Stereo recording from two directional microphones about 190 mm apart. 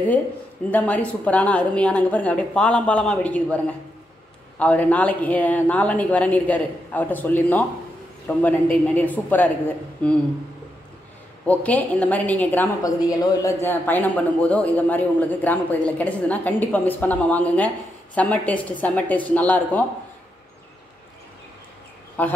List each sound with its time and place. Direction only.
0.7 s a man's voice: 10° left (ahead or behind)
11.4 s a man's voice: 10° left (ahead or behind)
12.8 s a man's voice: 20° left (ahead or behind)
22.2 s a man's voice: 10° left (ahead or behind)